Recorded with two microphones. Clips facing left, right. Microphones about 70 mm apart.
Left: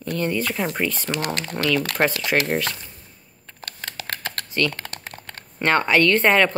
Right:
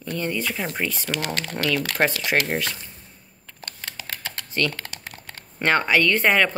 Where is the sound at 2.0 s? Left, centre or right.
Centre.